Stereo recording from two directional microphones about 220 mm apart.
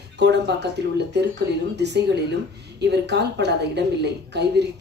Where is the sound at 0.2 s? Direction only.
50° right (ahead or behind).